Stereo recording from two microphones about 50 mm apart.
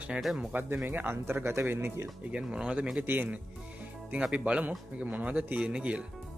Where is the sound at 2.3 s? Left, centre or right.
Right.